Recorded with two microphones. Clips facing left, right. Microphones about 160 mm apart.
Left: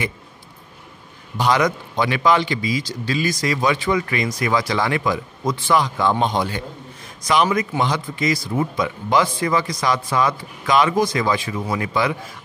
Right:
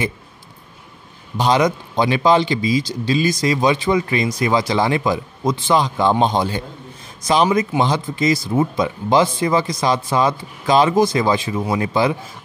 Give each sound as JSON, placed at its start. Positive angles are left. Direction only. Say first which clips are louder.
{"t": 1.4, "sound": "speech", "louder": "right 2 dB", "side_deg": -25}